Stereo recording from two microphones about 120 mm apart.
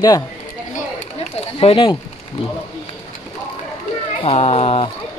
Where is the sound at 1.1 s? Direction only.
55° left (ahead or behind).